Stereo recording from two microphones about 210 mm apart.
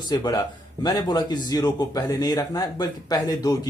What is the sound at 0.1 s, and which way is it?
A man's voice, 20° left (ahead or behind).